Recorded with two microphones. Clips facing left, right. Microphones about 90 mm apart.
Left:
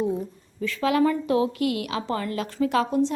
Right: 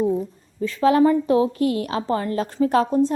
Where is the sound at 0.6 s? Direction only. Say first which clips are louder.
Right 5 dB; 35° right (ahead or behind).